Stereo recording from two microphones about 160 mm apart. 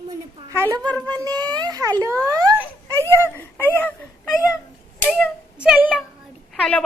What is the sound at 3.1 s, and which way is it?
Speech, 15° left (ahead or behind).